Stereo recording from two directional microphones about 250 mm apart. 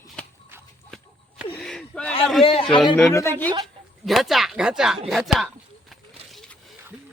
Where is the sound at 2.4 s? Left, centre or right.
Left.